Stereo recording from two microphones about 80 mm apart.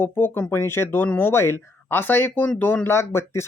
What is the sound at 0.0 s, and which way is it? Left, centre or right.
Speech, left.